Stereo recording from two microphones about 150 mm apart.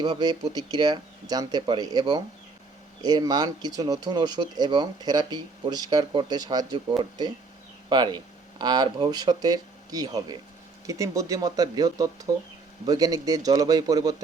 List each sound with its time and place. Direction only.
0.0 s speech: 30° right (ahead or behind)